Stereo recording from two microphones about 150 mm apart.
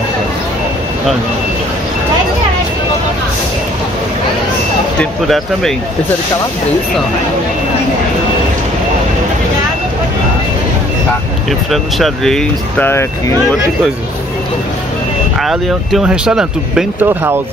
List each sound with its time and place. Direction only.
4.9 s speech: 5° left (ahead or behind)
11.7 s speech: centre (ahead or behind)
15.4 s speech: 5° right (ahead or behind)
17.0 s speech: 15° right (ahead or behind)